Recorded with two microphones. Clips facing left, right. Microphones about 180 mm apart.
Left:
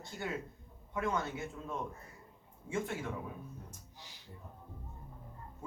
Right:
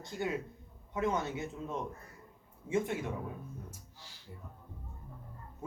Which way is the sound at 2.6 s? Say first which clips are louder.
Right 5 dB; 20° right (ahead or behind).